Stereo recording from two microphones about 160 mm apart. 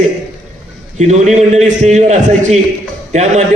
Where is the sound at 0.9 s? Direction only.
45° right (ahead or behind).